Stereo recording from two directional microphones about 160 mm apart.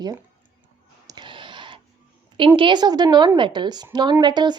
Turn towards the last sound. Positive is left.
turn(degrees=-25)  # may be behind; listen again after turning